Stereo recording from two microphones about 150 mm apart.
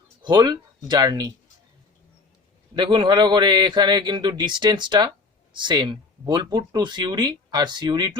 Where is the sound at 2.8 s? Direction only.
30° right (ahead or behind).